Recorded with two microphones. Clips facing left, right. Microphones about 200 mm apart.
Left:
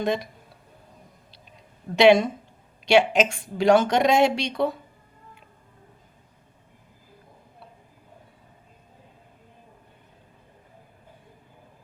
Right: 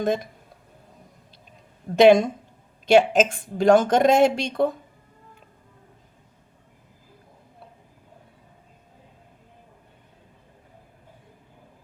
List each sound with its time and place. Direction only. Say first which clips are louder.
0.0 s speech: right 2 dB; 50° right (ahead or behind)
2.0 s speech: right 2 dB; 45° right (ahead or behind)